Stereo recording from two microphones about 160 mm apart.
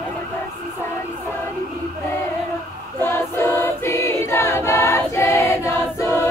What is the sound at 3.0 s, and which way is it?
Choir, 15° left (ahead or behind).